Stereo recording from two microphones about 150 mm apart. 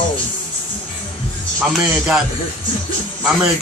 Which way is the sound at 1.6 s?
5° right (ahead or behind).